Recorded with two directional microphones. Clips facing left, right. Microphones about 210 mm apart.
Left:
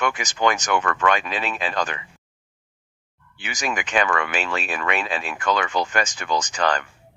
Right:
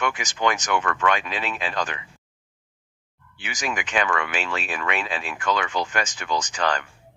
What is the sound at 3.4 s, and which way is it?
Speech, 40° left (ahead or behind).